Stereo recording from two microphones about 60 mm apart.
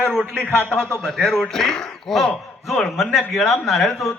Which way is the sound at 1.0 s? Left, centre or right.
Centre.